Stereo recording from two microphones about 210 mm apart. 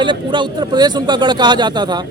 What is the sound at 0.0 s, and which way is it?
A man's voice, 20° right (ahead or behind).